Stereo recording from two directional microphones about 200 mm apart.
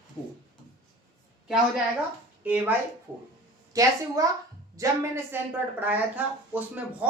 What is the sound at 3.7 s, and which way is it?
Speech, 15° right (ahead or behind).